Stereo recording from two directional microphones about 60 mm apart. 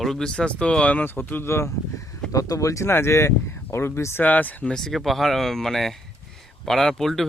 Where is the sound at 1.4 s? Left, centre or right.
Left.